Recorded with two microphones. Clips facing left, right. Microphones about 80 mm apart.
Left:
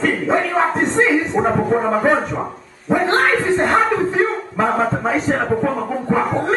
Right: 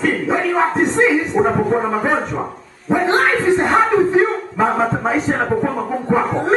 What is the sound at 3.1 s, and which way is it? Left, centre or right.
Music, centre.